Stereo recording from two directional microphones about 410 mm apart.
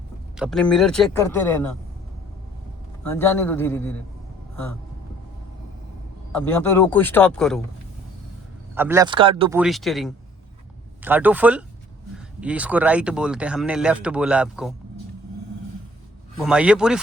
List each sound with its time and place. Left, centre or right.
0.3 s speech: centre
3.0 s speech: centre
6.3 s speech: centre
8.7 s speech: centre
16.4 s speech: centre